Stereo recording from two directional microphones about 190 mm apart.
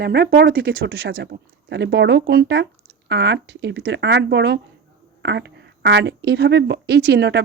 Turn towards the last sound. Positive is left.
turn(degrees=-65)  # may be behind; listen again after turning